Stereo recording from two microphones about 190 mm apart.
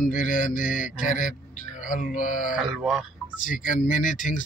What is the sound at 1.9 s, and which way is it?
Mantra, 45° left (ahead or behind).